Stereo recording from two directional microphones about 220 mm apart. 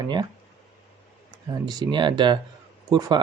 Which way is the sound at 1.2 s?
20° right (ahead or behind).